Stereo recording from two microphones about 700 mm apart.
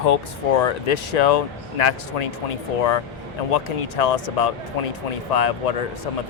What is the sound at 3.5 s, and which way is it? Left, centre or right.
Speech, left.